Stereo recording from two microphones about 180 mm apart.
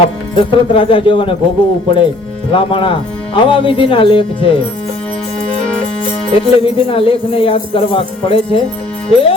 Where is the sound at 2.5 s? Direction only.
30° left (ahead or behind).